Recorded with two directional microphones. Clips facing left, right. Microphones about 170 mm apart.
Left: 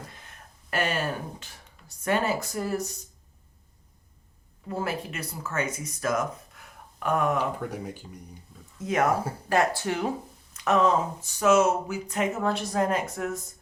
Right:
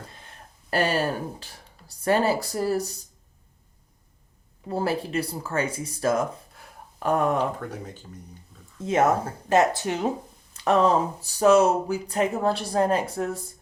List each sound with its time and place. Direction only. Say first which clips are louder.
0.2 s speech: right 2 dB; 35° right (ahead or behind)
4.7 s speech: right 5 dB; 30° right (ahead or behind)
7.7 s speech: left 1 dB; 10° left (ahead or behind)
8.8 s speech: right 3 dB; 25° right (ahead or behind)
10.5 s speech: right 2 dB; 30° right (ahead or behind)